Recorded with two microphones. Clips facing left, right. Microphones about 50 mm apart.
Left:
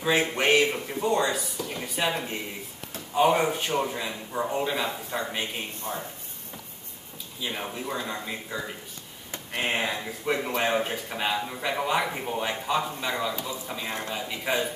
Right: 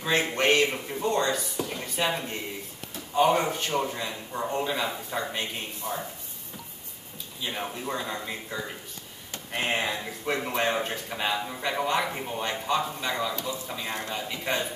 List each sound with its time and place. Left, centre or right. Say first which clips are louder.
0.0 s speech: left 1 dB; centre
1.7 s a sound: left 1 dB; centre
3.2 s a man's voice: left 1 dB; centre
5.9 s speech: right 1 dB; left
7.4 s a man's voice: even; centre